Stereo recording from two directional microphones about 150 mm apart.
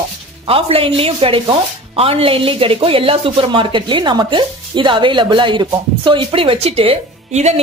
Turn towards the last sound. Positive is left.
turn(degrees=-50)  # may be behind; listen again after turning